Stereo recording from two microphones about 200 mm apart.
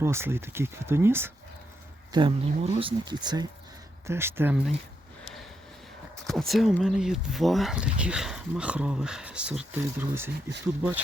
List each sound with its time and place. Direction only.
0.0 s speech: 10° right (ahead or behind)
2.1 s speech: 25° right (ahead or behind); by 4.6 s 10° right (ahead or behind)
6.2 s speech: centre (ahead or behind)